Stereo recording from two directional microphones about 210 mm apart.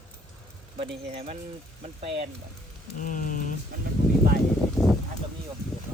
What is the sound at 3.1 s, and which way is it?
Speech, 40° left (ahead or behind).